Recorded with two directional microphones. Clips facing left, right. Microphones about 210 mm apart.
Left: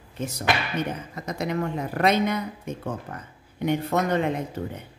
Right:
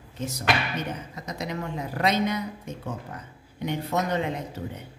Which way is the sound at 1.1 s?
55° left (ahead or behind).